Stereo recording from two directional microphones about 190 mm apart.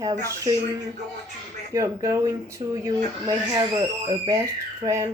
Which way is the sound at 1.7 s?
15° right (ahead or behind).